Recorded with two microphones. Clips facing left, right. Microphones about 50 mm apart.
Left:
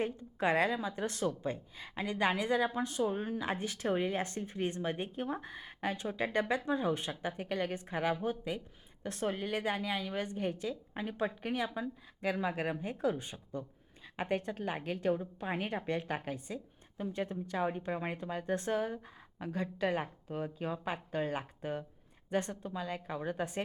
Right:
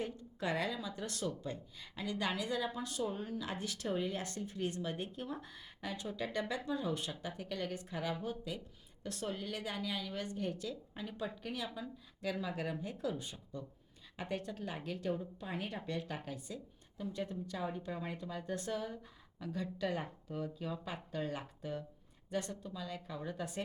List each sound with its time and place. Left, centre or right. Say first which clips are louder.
0.0 s speech: left 6 dB; left